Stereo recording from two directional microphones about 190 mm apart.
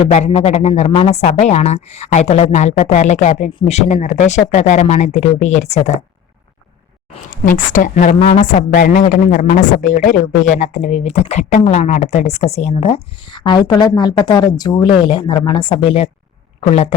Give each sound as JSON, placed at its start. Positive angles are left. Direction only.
{"t": 0.0, "sound": "speech", "side_deg": 35}
{"t": 7.3, "sound": "a woman's voice", "side_deg": 45}
{"t": 8.4, "sound": "a woman's voice", "side_deg": 45}